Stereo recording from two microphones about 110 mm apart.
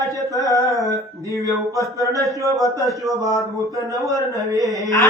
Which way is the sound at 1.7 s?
30° right (ahead or behind).